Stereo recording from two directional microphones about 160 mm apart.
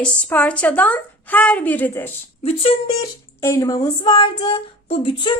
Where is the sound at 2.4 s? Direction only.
35° left (ahead or behind).